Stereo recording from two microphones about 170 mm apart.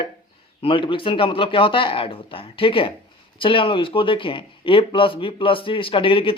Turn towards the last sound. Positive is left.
turn(degrees=30)  # may be behind; listen again after turning